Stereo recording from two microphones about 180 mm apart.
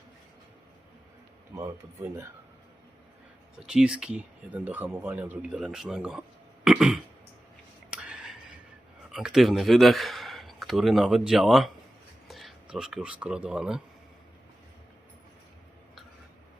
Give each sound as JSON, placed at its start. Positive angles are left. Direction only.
{"t": 1.5, "sound": "speech", "side_deg": -15}
{"t": 3.6, "sound": "speech", "side_deg": -5}
{"t": 7.9, "sound": "a sound", "side_deg": -5}
{"t": 9.1, "sound": "speech", "side_deg": 0}